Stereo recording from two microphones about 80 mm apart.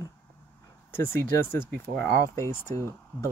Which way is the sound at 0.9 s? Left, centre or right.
Left.